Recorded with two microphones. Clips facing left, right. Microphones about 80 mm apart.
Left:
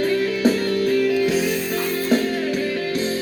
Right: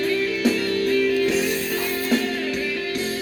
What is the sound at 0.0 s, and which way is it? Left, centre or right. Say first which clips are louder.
Music: left 3 dB; left.